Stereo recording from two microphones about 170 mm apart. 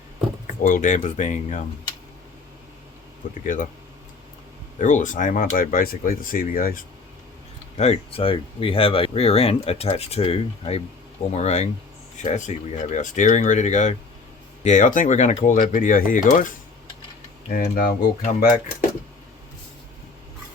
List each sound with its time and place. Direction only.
0.6 s speech: 50° left (ahead or behind)
3.4 s speech: 50° left (ahead or behind)
4.8 s speech: 45° left (ahead or behind)
7.8 s speech: 35° left (ahead or behind); by 18.9 s 55° left (ahead or behind)